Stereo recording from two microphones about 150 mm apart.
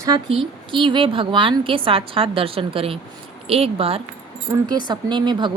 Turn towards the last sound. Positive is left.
turn(degrees=-30)  # may be behind; listen again after turning